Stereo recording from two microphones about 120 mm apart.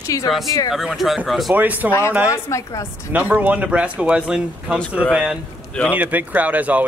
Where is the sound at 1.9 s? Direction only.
25° left (ahead or behind).